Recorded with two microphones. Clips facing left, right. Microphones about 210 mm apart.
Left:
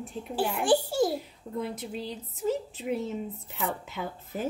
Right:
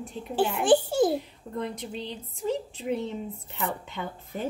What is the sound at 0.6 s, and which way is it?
Speech, 20° right (ahead or behind).